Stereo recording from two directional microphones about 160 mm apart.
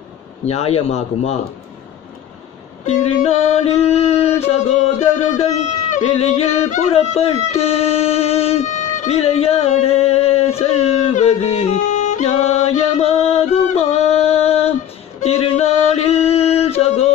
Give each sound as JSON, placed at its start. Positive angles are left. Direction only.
{"t": 0.5, "sound": "music", "side_deg": 40}
{"t": 2.8, "sound": "music", "side_deg": 45}
{"t": 4.4, "sound": "a sound", "side_deg": 45}